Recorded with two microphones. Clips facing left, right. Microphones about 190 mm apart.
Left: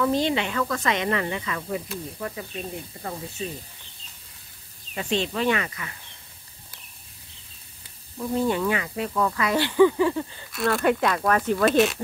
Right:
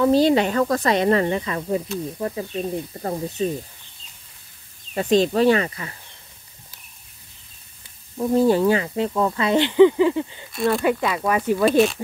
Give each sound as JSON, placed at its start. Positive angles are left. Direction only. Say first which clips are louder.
{"t": 0.0, "sound": "speech", "louder": "right 7 dB", "side_deg": -35}
{"t": 4.9, "sound": "speech", "louder": "right 8 dB", "side_deg": -40}
{"t": 8.2, "sound": "speech", "louder": "right 7 dB", "side_deg": -35}
{"t": 10.8, "sound": "speech", "louder": "right 1 dB", "side_deg": 0}